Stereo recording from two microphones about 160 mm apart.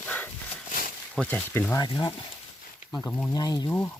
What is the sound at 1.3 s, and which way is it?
Speech, 10° left (ahead or behind).